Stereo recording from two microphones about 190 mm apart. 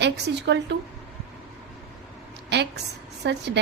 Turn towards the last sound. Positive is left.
turn(degrees=-65)  # may be behind; listen again after turning